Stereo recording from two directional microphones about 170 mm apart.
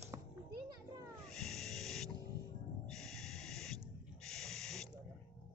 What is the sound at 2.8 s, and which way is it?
Owl, centre (ahead or behind).